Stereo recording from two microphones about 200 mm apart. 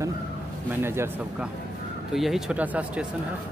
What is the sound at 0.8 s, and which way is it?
Speech, 10° right (ahead or behind).